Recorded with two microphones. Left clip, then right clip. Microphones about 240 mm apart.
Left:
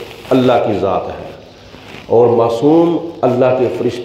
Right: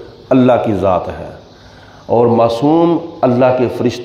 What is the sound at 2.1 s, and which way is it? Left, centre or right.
A man's voice, right.